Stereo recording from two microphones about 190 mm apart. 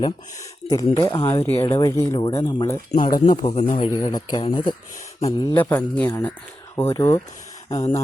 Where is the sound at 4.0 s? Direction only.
20° left (ahead or behind).